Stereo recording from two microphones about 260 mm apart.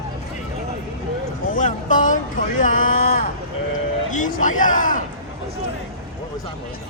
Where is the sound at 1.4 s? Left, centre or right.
Left.